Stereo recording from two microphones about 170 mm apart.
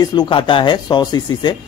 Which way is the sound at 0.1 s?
25° left (ahead or behind).